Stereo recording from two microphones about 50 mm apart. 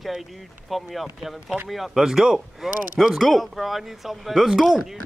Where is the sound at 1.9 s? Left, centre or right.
Centre.